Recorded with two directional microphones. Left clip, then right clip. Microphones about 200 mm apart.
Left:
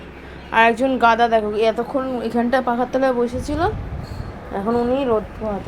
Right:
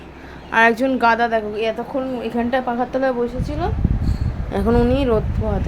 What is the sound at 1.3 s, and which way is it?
A woman's voice, 15° left (ahead or behind).